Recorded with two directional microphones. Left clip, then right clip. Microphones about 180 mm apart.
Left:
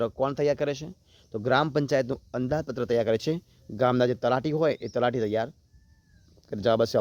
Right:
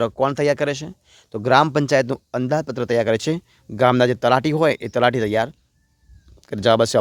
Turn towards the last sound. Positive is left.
turn(degrees=-30)  # may be behind; listen again after turning